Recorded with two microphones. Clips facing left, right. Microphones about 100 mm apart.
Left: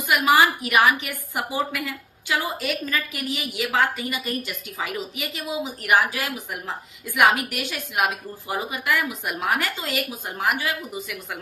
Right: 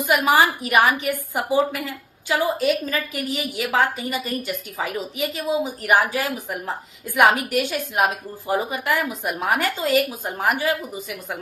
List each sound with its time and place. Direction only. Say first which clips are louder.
0.1 s a woman's voice: even; 40° right (ahead or behind)
5.4 s a woman's voice: right 5 dB; 50° right (ahead or behind)